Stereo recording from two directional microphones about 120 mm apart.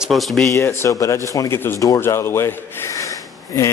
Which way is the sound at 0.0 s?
Centre (ahead or behind).